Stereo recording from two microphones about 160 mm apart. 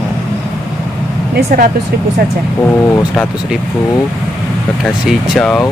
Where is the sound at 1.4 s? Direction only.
70° right (ahead or behind).